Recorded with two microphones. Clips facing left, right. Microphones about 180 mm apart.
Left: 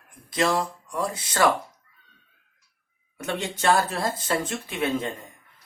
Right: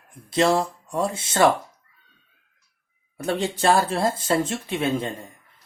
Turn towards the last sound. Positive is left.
turn(degrees=-25)  # may be behind; listen again after turning